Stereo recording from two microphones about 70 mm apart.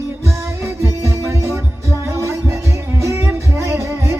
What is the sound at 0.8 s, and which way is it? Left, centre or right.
Music, right.